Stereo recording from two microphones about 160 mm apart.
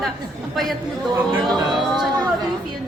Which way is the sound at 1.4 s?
Centre (ahead or behind).